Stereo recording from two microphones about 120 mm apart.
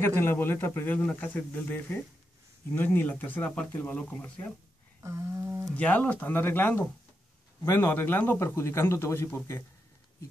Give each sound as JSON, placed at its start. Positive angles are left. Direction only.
{"t": 0.0, "sound": "a man's voice", "side_deg": 20}
{"t": 5.0, "sound": "a sound", "side_deg": -25}
{"t": 5.8, "sound": "a man's voice", "side_deg": 10}